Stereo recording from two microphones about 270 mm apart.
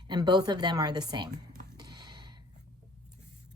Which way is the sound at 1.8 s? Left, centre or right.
Centre.